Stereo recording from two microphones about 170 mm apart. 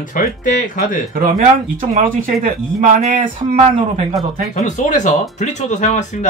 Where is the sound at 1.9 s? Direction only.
50° right (ahead or behind).